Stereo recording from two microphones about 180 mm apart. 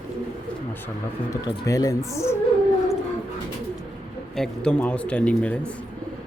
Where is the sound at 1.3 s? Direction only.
20° left (ahead or behind).